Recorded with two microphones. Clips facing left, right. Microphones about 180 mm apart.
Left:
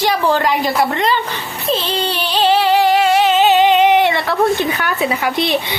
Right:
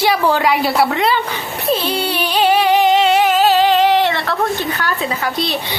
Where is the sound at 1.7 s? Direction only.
10° right (ahead or behind).